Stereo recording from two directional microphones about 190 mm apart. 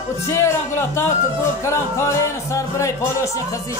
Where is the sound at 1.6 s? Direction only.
15° left (ahead or behind).